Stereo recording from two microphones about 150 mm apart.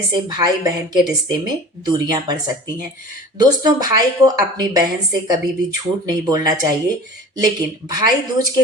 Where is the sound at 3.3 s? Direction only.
25° right (ahead or behind).